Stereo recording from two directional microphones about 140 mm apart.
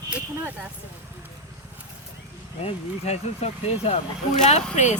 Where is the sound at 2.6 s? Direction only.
50° left (ahead or behind).